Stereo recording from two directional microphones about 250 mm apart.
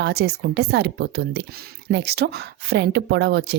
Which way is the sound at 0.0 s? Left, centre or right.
Right.